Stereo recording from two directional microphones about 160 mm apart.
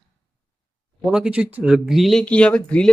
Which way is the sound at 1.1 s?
5° right (ahead or behind).